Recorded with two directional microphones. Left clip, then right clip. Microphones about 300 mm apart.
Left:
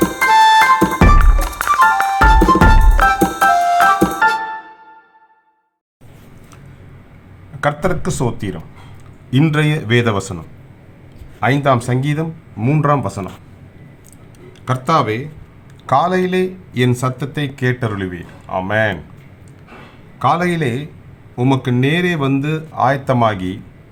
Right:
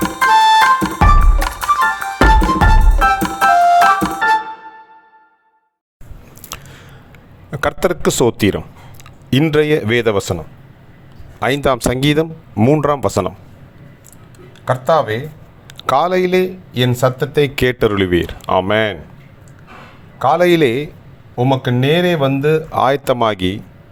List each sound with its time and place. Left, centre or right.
0.3 s music: centre
6.5 s a sound: right
7.6 s speech: right
11.3 s speech: right
14.6 s speech: centre
15.8 s a man's voice: right
16.3 s speech: centre
17.4 s speech: right
20.1 s a man's voice: centre
20.4 s speech: right
21.3 s speech: centre
22.7 s speech: right